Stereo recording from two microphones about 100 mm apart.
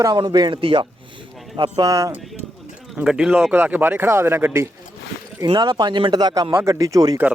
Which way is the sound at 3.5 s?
20° right (ahead or behind).